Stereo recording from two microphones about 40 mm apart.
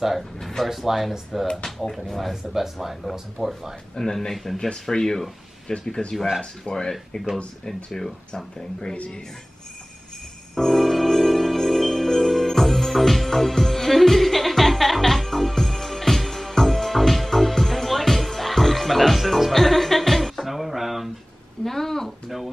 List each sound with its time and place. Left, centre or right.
0.4 s speech: centre
0.7 s speech: centre
2.5 s speech: centre
3.9 s speech: centre
5.7 s speech: left
8.9 s speech: left
10.5 s jingle bell: centre
21.6 s a sound: centre